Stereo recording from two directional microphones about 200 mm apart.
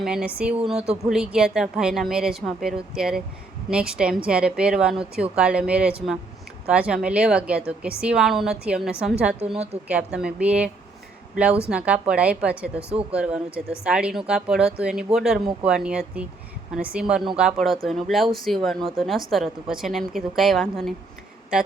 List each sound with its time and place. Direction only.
0.0 s a woman's voice: 5° right (ahead or behind)
11.7 s a woman's voice: 5° right (ahead or behind)
12.9 s speech: 30° right (ahead or behind)
13.1 s a woman's voice: 5° right (ahead or behind)